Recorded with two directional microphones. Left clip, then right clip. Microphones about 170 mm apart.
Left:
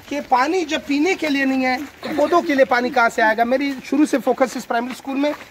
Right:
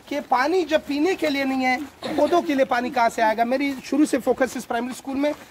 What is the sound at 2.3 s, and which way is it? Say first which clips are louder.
Speech: left 5 dB; 20° left (ahead or behind).